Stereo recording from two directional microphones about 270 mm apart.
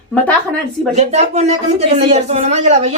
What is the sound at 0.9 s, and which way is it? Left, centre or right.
Speech, right.